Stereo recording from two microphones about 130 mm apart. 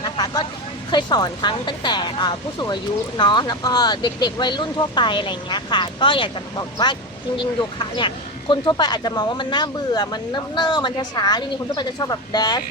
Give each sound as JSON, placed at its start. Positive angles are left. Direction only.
{"t": 0.0, "sound": "vehicle", "side_deg": 35}
{"t": 0.9, "sound": "speech", "side_deg": 35}